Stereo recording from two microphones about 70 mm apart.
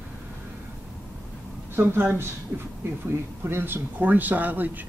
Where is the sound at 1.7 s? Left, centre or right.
Right.